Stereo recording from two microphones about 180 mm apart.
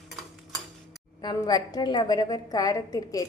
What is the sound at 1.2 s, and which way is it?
A woman's voice, 20° left (ahead or behind).